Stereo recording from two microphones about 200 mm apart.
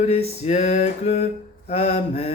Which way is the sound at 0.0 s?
30° left (ahead or behind).